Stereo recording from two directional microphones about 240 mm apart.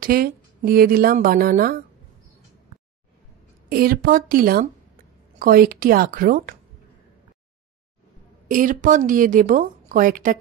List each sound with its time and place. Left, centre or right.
0.0 s speech: right
3.6 s speech: right
8.5 s speech: right